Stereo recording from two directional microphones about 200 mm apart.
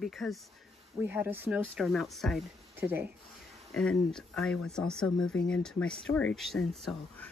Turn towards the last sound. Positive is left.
turn(degrees=0)  # may be behind; listen again after turning